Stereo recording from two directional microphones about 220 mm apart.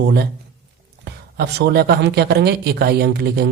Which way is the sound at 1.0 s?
50° right (ahead or behind).